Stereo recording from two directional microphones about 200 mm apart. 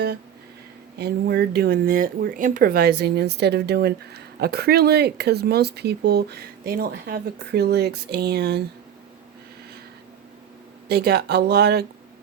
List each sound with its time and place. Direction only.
0.9 s speech: 55° right (ahead or behind)
10.8 s speech: 50° right (ahead or behind)